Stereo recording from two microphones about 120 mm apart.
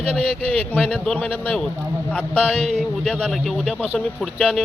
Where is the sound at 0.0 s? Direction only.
55° right (ahead or behind).